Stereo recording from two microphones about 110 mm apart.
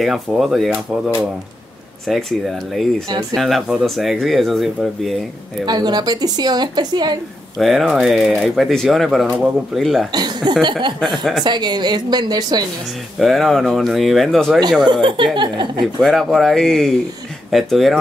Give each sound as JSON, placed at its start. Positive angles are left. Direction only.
{"t": 0.0, "sound": "speech", "side_deg": -5}
{"t": 2.0, "sound": "speech", "side_deg": 0}
{"t": 3.1, "sound": "a woman's voice", "side_deg": -40}
{"t": 3.3, "sound": "speech", "side_deg": 0}
{"t": 5.7, "sound": "a woman's voice", "side_deg": -40}
{"t": 7.5, "sound": "speech", "side_deg": 0}
{"t": 10.1, "sound": "a woman's voice", "side_deg": -40}
{"t": 13.2, "sound": "speech", "side_deg": 0}
{"t": 14.9, "sound": "speech", "side_deg": -50}
{"t": 15.8, "sound": "speech", "side_deg": 0}